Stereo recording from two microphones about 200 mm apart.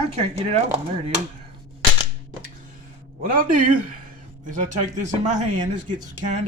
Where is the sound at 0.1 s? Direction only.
30° right (ahead or behind).